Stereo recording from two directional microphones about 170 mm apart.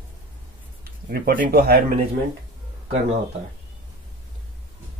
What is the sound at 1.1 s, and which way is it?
Speech, 55° right (ahead or behind).